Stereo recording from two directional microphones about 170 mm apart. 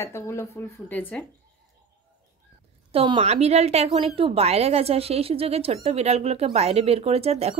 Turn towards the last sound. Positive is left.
turn(degrees=-35)  # may be behind; listen again after turning